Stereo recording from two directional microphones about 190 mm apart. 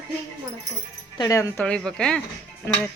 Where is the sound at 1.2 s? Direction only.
15° left (ahead or behind).